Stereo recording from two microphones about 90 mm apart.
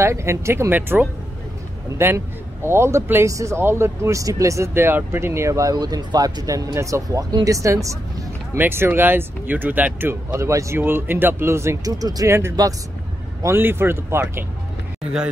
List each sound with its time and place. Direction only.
0.0 s speech: 30° right (ahead or behind)
8.5 s speech: 25° right (ahead or behind); by 12.3 s 45° right (ahead or behind)
12.3 s speech: 30° right (ahead or behind)